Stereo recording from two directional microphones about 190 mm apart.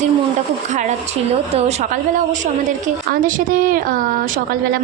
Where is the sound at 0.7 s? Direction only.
40° right (ahead or behind).